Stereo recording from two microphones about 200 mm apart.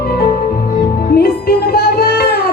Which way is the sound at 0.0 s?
50° left (ahead or behind).